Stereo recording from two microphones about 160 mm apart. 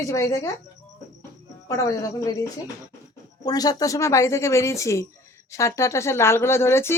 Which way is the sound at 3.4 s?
25° left (ahead or behind).